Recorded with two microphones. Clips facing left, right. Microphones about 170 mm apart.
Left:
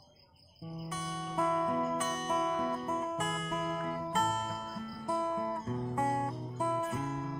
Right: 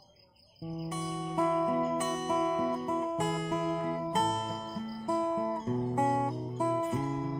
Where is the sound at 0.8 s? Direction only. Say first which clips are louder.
Right 4 dB; 15° right (ahead or behind).